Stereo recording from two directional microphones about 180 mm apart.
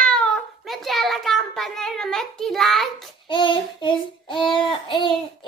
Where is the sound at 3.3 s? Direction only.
25° left (ahead or behind).